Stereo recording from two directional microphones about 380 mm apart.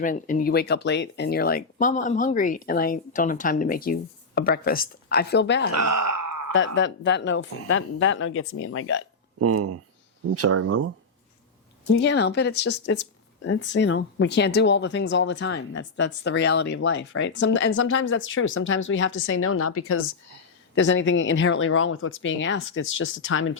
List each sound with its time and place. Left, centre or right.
0.0 s speech: left
5.7 s speech: right
6.5 s speech: left
9.4 s speech: right
11.9 s speech: left